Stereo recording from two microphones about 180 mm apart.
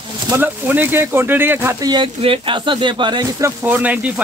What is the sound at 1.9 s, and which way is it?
Speech, 30° right (ahead or behind).